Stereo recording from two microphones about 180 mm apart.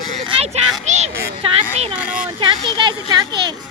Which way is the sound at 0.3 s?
35° right (ahead or behind).